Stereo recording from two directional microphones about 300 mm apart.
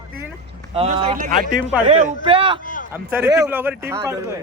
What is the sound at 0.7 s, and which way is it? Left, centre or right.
Speech, centre.